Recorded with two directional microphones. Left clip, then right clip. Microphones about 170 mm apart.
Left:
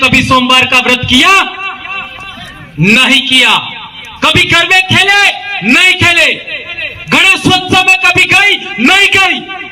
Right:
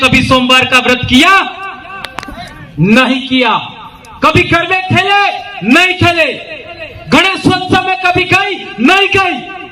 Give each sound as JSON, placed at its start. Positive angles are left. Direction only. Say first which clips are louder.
{"t": 0.0, "sound": "a man's voice", "louder": "left 1 dB", "side_deg": 5}
{"t": 2.8, "sound": "a man's voice", "louder": "left 4 dB", "side_deg": 10}